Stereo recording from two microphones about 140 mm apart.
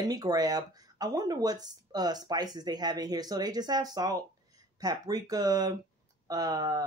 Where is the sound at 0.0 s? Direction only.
30° right (ahead or behind).